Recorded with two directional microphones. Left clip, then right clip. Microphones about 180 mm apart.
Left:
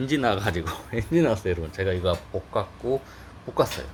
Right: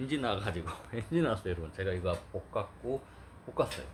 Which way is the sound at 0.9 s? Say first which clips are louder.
Left 9 dB; 10° left (ahead or behind).